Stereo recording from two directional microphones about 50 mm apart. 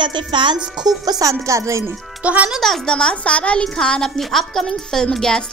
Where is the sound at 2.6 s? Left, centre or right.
Centre.